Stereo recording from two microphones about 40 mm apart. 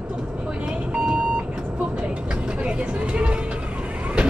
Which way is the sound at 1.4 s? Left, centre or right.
Right.